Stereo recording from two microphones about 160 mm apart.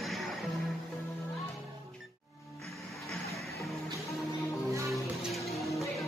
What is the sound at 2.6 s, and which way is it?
Music, centre (ahead or behind).